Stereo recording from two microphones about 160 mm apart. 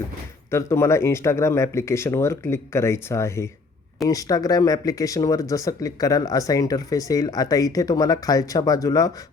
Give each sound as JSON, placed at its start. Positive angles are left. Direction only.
{"t": 0.5, "sound": "speech", "side_deg": 15}